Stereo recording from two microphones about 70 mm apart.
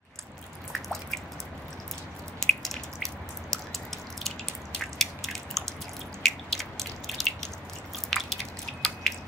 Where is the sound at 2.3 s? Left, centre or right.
Centre.